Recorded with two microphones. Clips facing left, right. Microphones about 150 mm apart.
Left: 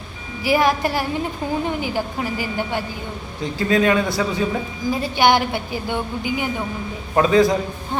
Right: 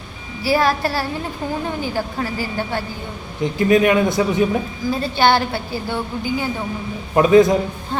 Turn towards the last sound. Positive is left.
turn(degrees=-20)  # may be behind; listen again after turning